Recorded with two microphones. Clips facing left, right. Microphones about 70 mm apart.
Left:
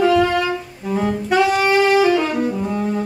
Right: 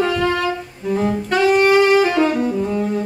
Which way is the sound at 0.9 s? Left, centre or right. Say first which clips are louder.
Left 1 dB; centre.